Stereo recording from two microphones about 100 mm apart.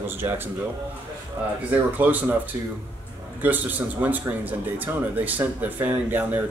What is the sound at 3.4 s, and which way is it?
Speech, 20° right (ahead or behind).